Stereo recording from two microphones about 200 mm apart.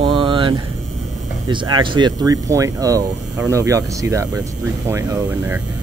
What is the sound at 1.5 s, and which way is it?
Speech, 25° right (ahead or behind).